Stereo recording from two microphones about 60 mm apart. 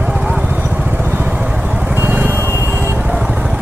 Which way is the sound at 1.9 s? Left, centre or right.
Right.